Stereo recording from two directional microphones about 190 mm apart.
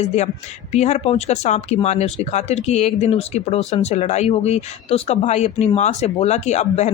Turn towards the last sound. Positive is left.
turn(degrees=35)  # may be behind; listen again after turning